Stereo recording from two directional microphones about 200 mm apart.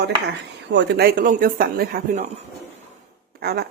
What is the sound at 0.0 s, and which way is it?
A woman's voice, 60° right (ahead or behind).